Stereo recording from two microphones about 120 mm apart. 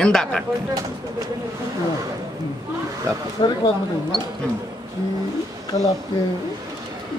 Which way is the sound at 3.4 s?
35° left (ahead or behind).